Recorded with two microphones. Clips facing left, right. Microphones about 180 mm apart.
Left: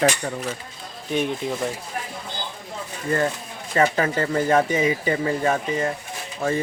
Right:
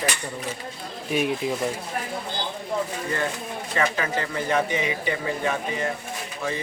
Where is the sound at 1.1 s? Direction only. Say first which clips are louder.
Even; 5° right (ahead or behind).